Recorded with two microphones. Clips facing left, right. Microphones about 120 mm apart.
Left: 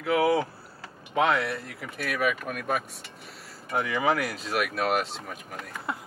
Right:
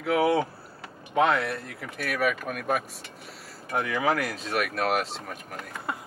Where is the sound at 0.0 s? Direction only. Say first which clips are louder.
Even; centre (ahead or behind).